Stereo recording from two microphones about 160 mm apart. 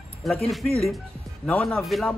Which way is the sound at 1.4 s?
5° left (ahead or behind).